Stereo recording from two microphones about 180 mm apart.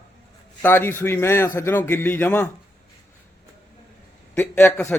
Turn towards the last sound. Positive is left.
turn(degrees=10)  # may be behind; listen again after turning